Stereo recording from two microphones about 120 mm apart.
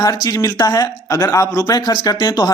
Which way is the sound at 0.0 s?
30° left (ahead or behind).